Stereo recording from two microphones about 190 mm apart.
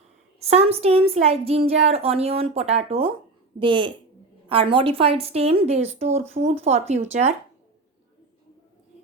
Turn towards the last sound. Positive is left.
turn(degrees=-35)  # may be behind; listen again after turning